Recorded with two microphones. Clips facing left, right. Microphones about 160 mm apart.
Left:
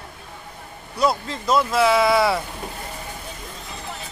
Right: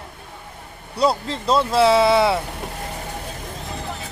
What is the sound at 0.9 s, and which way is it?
Speech, 30° right (ahead or behind).